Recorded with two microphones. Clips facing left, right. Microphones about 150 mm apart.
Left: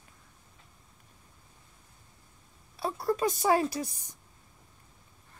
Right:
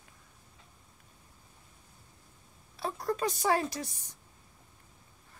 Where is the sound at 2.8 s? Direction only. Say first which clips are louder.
Left 3 dB; 10° left (ahead or behind).